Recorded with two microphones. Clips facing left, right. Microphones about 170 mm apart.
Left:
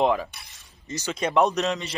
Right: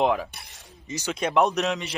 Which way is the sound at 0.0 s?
Centre (ahead or behind).